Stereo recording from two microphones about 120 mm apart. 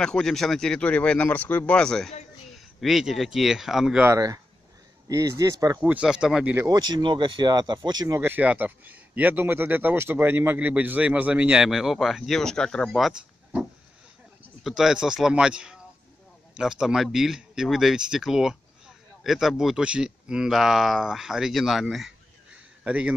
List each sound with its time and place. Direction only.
0.0 s speech: 5° left (ahead or behind)
4.0 s speech: 25° right (ahead or behind)
5.8 s speech: 10° right (ahead or behind)
6.5 s speech: 30° right (ahead or behind)
8.2 s speech: 15° right (ahead or behind)
14.6 s speech: centre (ahead or behind)